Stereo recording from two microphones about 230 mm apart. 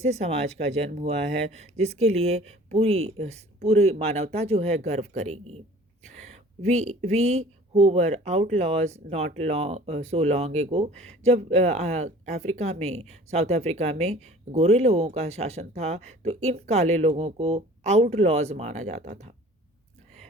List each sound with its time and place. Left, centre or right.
0.0 s speech: right